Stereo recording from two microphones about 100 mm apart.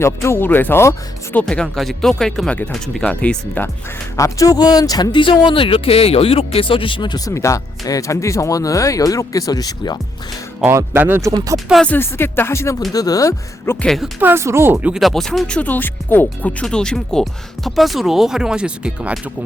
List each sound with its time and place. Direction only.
0.0 s speech: 25° left (ahead or behind)
1.4 s speech: 10° left (ahead or behind)
4.2 s speech: 35° left (ahead or behind)
5.1 s speech: 55° left (ahead or behind)
7.3 s speech: 30° left (ahead or behind)
10.7 s speech: 25° right (ahead or behind)
11.5 s speech: centre (ahead or behind)
11.9 s speech: 20° left (ahead or behind)
12.9 s speech: 40° left (ahead or behind)
13.8 s speech: centre (ahead or behind)
14.2 s speech: 25° right (ahead or behind)
15.0 s speech: 5° left (ahead or behind)